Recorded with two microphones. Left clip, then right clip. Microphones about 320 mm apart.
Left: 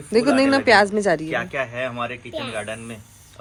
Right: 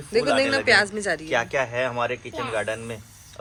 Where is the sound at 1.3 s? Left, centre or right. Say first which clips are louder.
Right 1 dB; right.